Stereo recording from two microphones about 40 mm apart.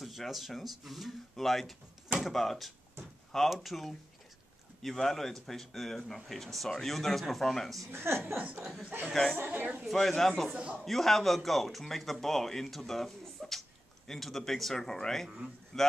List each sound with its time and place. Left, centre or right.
0.0 s speech: centre
7.9 s a woman's voice: right
8.5 s speech: centre
9.1 s speech: centre
9.5 s a man's voice: right
9.8 s speech: centre
15.2 s a man's voice: centre
15.7 s speech: centre